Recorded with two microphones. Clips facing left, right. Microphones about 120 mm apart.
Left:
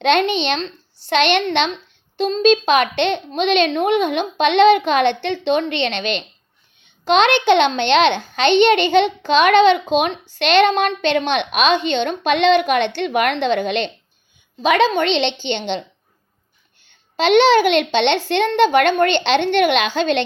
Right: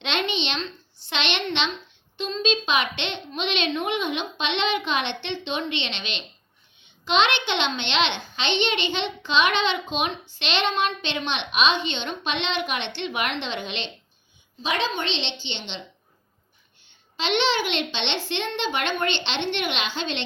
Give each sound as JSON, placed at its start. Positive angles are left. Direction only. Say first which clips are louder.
{"t": 0.0, "sound": "a child's voice", "louder": "left 11 dB", "side_deg": 50}
{"t": 14.6, "sound": "a woman's voice", "louder": "left 11 dB", "side_deg": 60}
{"t": 17.2, "sound": "a child's voice", "louder": "left 11 dB", "side_deg": 45}